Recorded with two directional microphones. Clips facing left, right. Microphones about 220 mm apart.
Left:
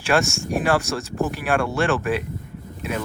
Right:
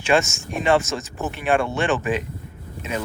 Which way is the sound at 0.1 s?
5° right (ahead or behind).